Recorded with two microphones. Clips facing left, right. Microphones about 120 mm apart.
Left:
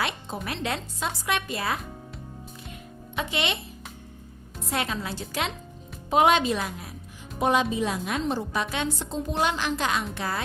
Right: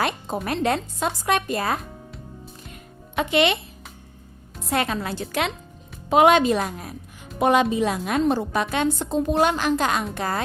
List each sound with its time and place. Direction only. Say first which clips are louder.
0.4 s speech: right 8 dB; 45° right (ahead or behind)
3.2 s a woman's voice: right 9 dB; 60° right (ahead or behind)
4.7 s a woman's voice: right 5 dB; 60° right (ahead or behind)
7.3 s a woman's voice: right 5 dB; 60° right (ahead or behind)